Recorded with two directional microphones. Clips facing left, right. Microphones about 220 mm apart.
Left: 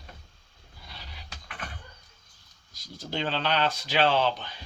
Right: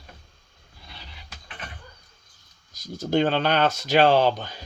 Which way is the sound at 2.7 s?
45° right (ahead or behind).